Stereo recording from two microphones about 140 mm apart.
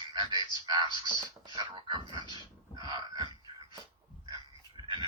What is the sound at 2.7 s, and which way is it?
Wail, 30° right (ahead or behind).